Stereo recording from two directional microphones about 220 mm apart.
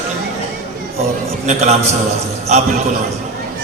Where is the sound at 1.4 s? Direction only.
30° right (ahead or behind).